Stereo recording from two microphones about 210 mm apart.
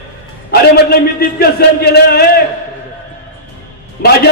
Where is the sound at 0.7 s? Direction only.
50° left (ahead or behind).